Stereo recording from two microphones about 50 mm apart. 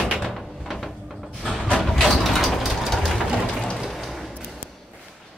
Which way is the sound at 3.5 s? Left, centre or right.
Centre.